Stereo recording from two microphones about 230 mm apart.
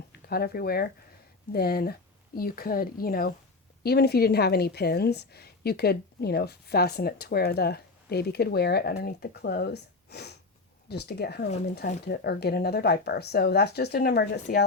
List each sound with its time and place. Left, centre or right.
0.1 s a woman's voice: left